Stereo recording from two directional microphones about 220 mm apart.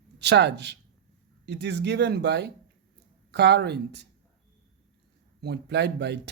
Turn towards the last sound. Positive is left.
turn(degrees=-50)  # may be behind; listen again after turning